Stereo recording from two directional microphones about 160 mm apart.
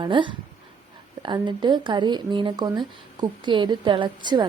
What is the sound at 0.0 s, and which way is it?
Speech, 30° right (ahead or behind).